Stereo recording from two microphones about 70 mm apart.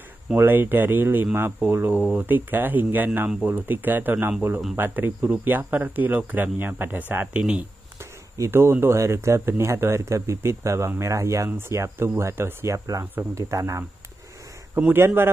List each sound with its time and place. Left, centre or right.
0.4 s speech: right
7.3 s speech: centre
8.0 s a sound: right
8.9 s speech: right
13.0 s speech: right
13.3 s speech: right
14.8 s a man's voice: right